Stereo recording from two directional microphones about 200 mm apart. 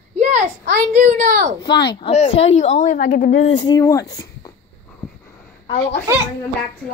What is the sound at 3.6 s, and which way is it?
Speech, 15° left (ahead or behind).